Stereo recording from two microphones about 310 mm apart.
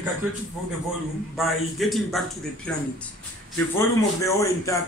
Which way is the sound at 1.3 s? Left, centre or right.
Centre.